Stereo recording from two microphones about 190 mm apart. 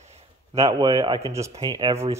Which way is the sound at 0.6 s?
20° right (ahead or behind).